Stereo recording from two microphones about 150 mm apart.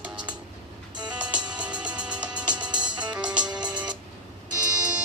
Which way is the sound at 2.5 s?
30° right (ahead or behind).